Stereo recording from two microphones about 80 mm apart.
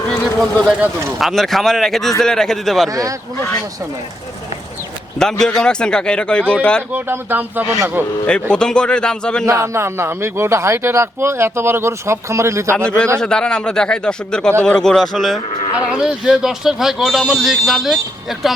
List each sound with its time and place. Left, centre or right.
0.3 s speech: centre
2.9 s speech: right
5.2 s speech: centre
6.9 s speech: right
8.3 s speech: centre
9.5 s a man's voice: right
13.1 s speech: centre
15.9 s speech: centre